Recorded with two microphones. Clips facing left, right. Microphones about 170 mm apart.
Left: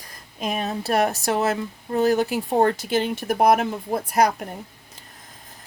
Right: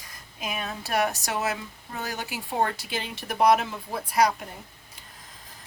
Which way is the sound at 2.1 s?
50° left (ahead or behind).